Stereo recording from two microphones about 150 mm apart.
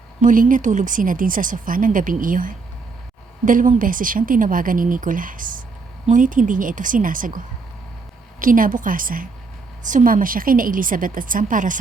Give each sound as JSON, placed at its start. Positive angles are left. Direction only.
{"t": 0.2, "sound": "a woman's voice", "side_deg": -60}